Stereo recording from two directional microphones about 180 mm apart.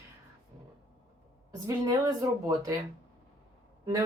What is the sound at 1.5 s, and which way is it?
Speech, 20° right (ahead or behind).